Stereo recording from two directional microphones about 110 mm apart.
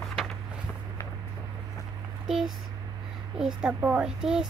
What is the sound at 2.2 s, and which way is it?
A child's voice, 5° right (ahead or behind).